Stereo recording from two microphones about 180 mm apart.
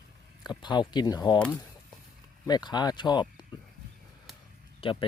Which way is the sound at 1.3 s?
5° left (ahead or behind).